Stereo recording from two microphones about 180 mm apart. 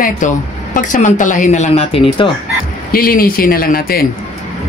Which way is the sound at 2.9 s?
55° left (ahead or behind).